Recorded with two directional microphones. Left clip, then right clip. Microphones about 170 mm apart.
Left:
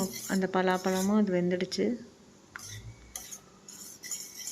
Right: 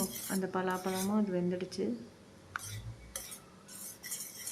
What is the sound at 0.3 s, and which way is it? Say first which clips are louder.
A woman's voice: left 7 dB; 25° left (ahead or behind).